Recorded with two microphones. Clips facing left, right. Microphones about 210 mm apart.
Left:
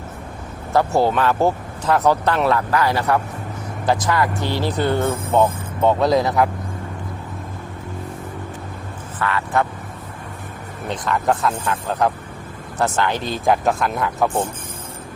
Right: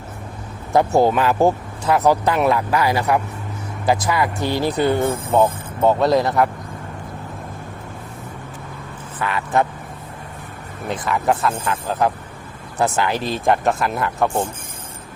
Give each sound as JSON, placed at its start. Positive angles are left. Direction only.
{"t": 0.7, "sound": "speech", "side_deg": -15}
{"t": 9.2, "sound": "speech", "side_deg": -15}
{"t": 10.8, "sound": "speech", "side_deg": -5}